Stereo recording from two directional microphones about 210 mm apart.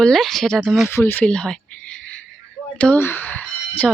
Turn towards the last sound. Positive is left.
turn(degrees=10)  # may be behind; listen again after turning